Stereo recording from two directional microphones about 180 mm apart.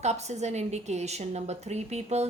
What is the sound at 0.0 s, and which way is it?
A woman's voice, 40° right (ahead or behind).